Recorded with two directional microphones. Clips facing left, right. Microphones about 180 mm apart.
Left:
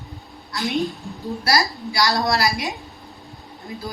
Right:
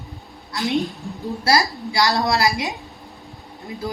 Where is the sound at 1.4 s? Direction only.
25° right (ahead or behind).